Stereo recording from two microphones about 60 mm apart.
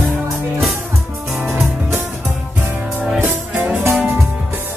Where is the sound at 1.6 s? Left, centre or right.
Right.